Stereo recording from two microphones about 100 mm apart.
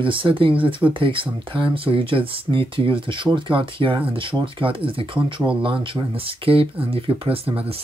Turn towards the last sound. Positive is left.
turn(degrees=-70)  # may be behind; listen again after turning